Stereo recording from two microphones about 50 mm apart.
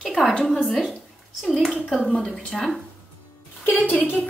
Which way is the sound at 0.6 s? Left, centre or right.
Centre.